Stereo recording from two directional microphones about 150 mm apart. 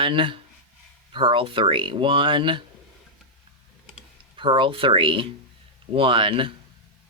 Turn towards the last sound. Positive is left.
turn(degrees=-35)  # may be behind; listen again after turning